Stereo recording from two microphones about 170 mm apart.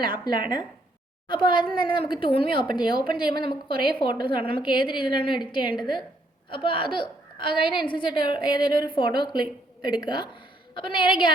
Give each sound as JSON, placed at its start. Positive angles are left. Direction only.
{"t": 0.0, "sound": "a woman's voice", "side_deg": 25}